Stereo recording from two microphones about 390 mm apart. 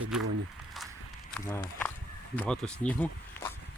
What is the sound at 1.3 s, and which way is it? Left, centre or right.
Speech, centre.